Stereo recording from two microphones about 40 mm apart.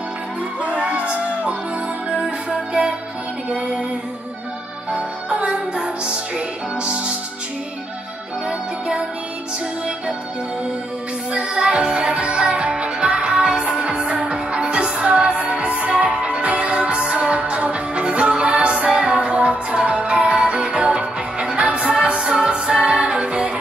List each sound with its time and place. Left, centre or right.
0.6 s music: right
4.9 s music: right
8.5 s music: right
11.3 s music: right